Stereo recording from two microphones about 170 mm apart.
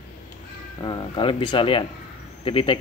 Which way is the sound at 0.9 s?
25° left (ahead or behind).